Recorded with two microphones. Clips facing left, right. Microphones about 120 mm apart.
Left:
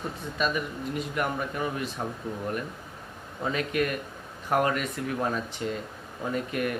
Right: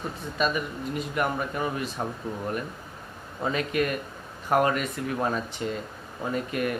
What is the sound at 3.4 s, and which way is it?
Speech, 30° right (ahead or behind).